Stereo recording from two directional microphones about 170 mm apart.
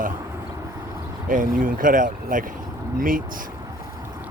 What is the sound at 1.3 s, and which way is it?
Speech, 50° right (ahead or behind).